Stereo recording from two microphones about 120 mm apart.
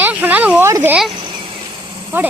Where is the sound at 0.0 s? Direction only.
15° right (ahead or behind).